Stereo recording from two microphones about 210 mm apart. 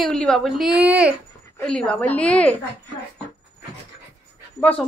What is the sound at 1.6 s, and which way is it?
Speech, 5° left (ahead or behind).